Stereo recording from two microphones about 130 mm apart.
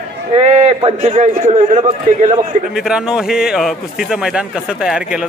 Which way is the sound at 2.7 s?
5° right (ahead or behind).